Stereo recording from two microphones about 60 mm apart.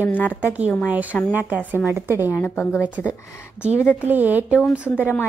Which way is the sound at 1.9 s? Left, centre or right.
Right.